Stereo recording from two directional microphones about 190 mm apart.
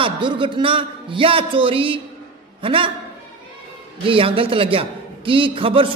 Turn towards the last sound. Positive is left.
turn(degrees=-30)  # may be behind; listen again after turning